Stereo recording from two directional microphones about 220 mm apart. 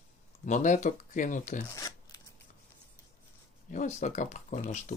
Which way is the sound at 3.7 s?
35° left (ahead or behind).